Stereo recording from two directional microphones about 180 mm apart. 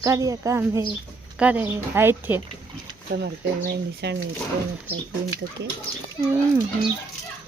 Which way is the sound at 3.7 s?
70° right (ahead or behind).